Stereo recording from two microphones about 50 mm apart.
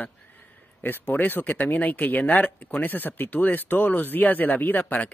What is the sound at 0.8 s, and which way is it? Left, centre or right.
Speech, left.